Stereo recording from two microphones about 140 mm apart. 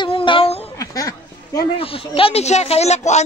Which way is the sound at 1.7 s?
40° left (ahead or behind).